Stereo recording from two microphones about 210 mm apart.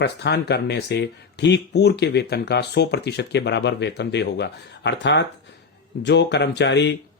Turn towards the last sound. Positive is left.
turn(degrees=55)  # may be behind; listen again after turning